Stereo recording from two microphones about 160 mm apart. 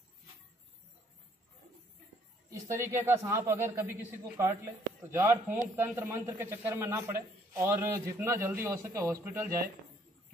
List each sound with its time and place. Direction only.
2.5 s a man's voice: 15° right (ahead or behind)